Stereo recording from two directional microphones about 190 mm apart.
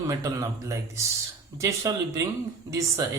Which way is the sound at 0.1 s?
15° right (ahead or behind).